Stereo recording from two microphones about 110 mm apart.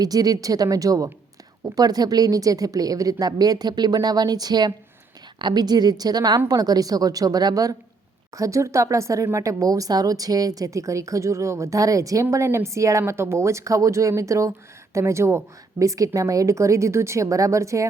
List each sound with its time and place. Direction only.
0.0 s speech: 35° right (ahead or behind)